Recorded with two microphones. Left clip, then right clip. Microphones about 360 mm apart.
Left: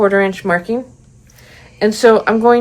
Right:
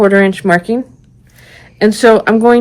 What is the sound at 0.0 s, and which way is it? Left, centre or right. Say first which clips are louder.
Speech: right 4 dB; right.